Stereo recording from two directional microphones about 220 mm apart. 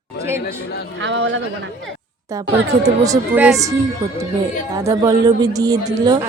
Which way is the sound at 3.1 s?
5° right (ahead or behind).